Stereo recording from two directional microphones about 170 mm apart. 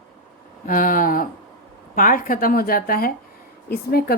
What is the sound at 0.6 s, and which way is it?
Speech, 55° left (ahead or behind).